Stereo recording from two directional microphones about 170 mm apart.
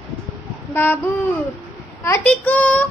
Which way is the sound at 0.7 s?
10° left (ahead or behind).